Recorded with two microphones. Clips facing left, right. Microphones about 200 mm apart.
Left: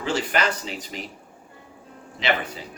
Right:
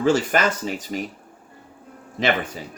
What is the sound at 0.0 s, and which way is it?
Speech, 45° right (ahead or behind).